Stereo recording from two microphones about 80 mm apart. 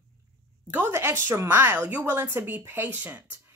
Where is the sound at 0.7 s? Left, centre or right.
Right.